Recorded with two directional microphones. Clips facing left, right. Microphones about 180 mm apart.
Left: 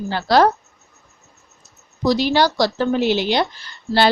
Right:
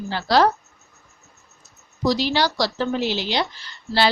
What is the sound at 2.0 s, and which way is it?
Speech, 55° left (ahead or behind).